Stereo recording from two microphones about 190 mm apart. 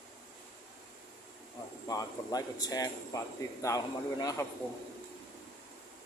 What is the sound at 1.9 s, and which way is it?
A man's voice, 20° left (ahead or behind).